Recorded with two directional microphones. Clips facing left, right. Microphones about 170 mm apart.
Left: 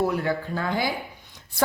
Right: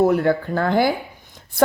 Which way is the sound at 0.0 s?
50° right (ahead or behind).